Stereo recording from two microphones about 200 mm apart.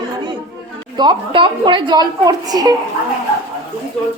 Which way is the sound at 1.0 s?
25° right (ahead or behind).